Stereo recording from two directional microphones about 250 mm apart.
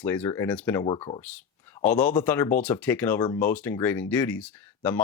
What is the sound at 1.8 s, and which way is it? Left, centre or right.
Speech, centre.